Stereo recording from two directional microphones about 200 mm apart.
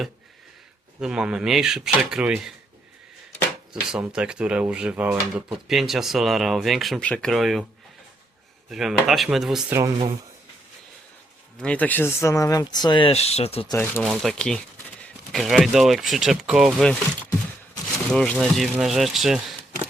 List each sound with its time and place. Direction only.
0.9 s speech: 5° right (ahead or behind)
3.8 s speech: 5° right (ahead or behind)
8.7 s speech: centre (ahead or behind)
11.6 s speech: 5° left (ahead or behind); by 13.7 s 30° left (ahead or behind)
13.7 s speech: 10° left (ahead or behind)
14.0 s speech: centre (ahead or behind)
18.1 s speech: 5° left (ahead or behind)